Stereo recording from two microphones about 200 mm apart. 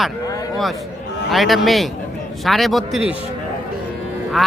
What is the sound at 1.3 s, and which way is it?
Speech, centre (ahead or behind).